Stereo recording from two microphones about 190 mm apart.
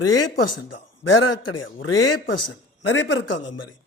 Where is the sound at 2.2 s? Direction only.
70° left (ahead or behind).